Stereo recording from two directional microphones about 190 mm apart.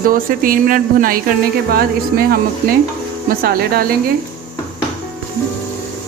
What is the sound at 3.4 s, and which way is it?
Speech, 50° right (ahead or behind).